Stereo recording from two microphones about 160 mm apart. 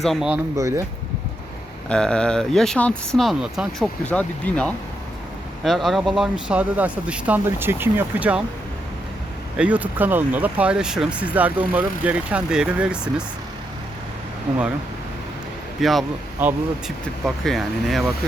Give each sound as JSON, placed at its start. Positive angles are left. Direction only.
{"t": 0.0, "sound": "speech", "side_deg": 0}
{"t": 0.5, "sound": "speech", "side_deg": -20}
{"t": 1.9, "sound": "speech", "side_deg": 5}
{"t": 4.0, "sound": "speech", "side_deg": 10}
{"t": 9.6, "sound": "speech", "side_deg": -10}
{"t": 15.8, "sound": "speech", "side_deg": 0}
{"t": 16.4, "sound": "speech", "side_deg": -10}
{"t": 17.2, "sound": "speech", "side_deg": 0}